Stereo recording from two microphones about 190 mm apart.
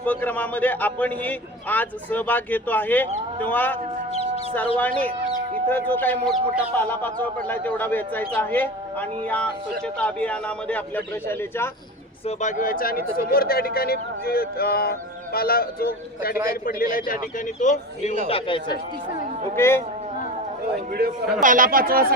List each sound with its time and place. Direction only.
0.0 s a man's voice: 10° left (ahead or behind)
4.8 s a man's voice: 10° left (ahead or behind)
12.2 s speech: 40° left (ahead or behind)
18.3 s a man's voice: 30° left (ahead or behind)
19.5 s a man's voice: 15° left (ahead or behind)
21.4 s speech: 45° right (ahead or behind)